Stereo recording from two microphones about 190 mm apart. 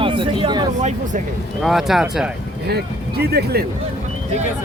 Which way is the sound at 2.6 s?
60° right (ahead or behind).